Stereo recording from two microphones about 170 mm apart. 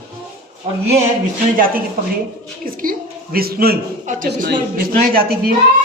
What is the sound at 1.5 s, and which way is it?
Speech, 55° right (ahead or behind).